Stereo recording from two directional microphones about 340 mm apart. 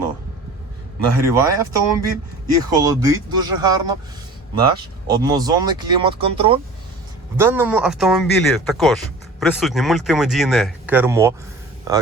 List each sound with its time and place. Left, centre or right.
1.2 s speech: centre
5.0 s speech: centre